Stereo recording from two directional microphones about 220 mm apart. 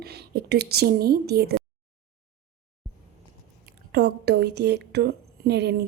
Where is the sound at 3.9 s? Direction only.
45° right (ahead or behind).